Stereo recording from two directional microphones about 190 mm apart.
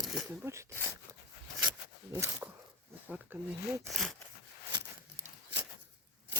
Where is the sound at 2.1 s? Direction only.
15° right (ahead or behind).